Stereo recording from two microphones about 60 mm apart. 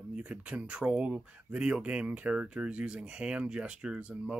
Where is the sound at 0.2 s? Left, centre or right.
Centre.